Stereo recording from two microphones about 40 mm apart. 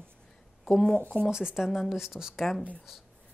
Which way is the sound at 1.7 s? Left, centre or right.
Centre.